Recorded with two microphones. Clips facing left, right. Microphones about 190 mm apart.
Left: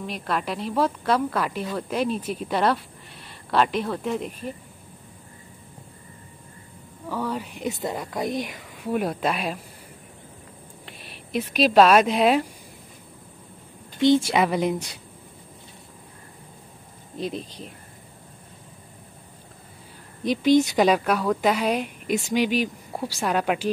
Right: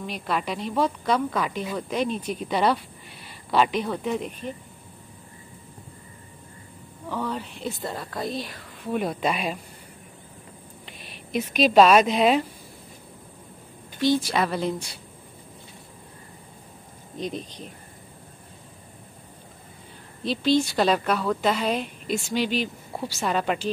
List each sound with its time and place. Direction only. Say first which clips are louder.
0.0 s speech: even; centre (ahead or behind)
7.1 s a woman's voice: left 1 dB; 10° left (ahead or behind)
11.5 s speech: even; centre (ahead or behind)
13.9 s speech: left 4 dB; 20° left (ahead or behind)
17.2 s speech: left 1 dB; centre (ahead or behind)
20.2 s a woman's voice: left 4 dB; 15° left (ahead or behind)